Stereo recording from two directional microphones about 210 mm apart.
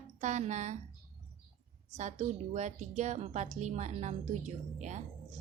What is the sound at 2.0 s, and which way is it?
Speech, 35° right (ahead or behind).